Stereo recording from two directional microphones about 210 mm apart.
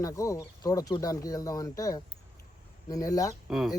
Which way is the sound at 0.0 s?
15° left (ahead or behind).